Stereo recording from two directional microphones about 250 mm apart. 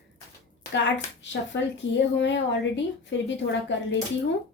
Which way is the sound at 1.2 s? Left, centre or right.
Left.